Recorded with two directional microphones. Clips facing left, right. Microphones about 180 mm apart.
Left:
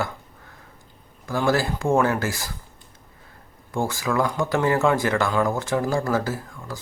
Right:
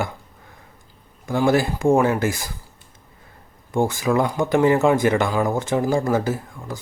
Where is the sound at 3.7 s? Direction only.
20° right (ahead or behind).